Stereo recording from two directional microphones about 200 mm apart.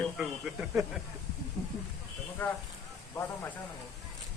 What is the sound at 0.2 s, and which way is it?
Speech, 5° right (ahead or behind).